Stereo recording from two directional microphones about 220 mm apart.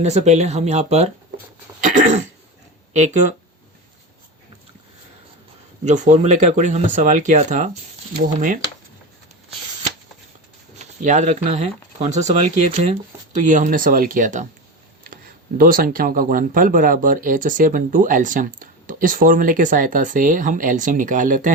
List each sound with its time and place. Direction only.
0.0 s speech: 30° right (ahead or behind)
1.8 s cough: 35° right (ahead or behind)
5.8 s speech: 35° right (ahead or behind)
10.8 s speech: 35° right (ahead or behind)